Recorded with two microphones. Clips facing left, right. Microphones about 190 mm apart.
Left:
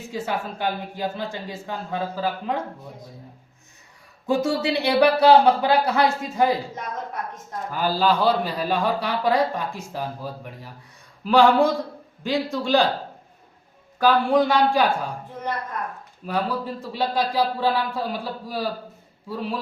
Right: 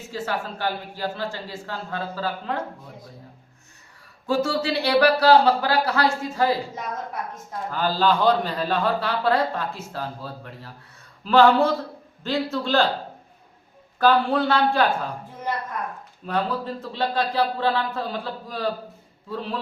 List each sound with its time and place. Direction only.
0.1 s a man's voice: 15° left (ahead or behind)
4.3 s speech: 20° left (ahead or behind)
7.7 s a man's voice: 10° left (ahead or behind)
14.0 s a man's voice: 10° left (ahead or behind)
16.2 s a man's voice: 10° left (ahead or behind)